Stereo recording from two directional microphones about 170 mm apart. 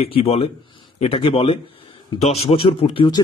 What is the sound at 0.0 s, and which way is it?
Speech, 35° left (ahead or behind).